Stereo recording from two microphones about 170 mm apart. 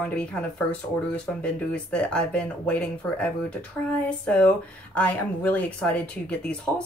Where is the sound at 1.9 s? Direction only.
5° left (ahead or behind).